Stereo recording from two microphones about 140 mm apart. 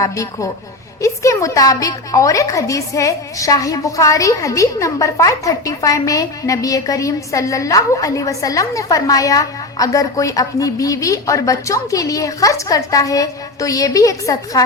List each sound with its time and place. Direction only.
0.0 s a woman's voice: 25° left (ahead or behind)